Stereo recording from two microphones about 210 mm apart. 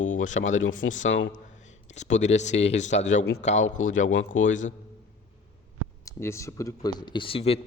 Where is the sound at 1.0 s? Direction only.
65° left (ahead or behind).